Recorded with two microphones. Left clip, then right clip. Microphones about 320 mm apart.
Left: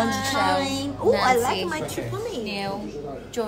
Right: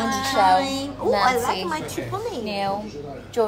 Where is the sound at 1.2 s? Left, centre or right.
Centre.